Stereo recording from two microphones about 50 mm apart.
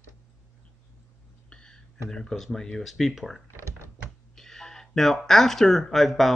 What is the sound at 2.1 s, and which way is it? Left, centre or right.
Speech, centre.